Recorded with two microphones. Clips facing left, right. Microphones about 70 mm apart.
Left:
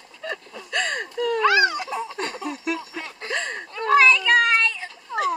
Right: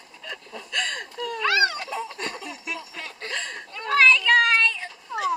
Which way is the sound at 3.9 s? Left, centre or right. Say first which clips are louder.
Left 2 dB; centre.